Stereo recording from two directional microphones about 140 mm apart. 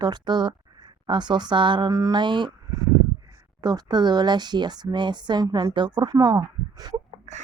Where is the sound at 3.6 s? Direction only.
30° right (ahead or behind).